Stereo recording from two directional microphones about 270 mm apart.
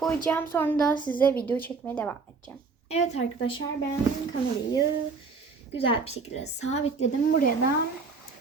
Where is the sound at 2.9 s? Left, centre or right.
Left.